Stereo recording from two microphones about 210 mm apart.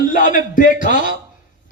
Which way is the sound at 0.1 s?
40° left (ahead or behind).